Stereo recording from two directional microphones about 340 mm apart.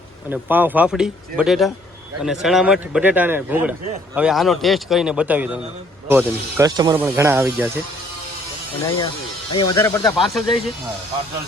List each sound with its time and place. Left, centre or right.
0.3 s a man's voice: centre
9.5 s speech: left
9.7 s a man's voice: centre